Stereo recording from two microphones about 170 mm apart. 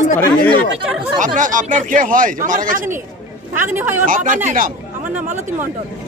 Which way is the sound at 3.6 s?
15° right (ahead or behind).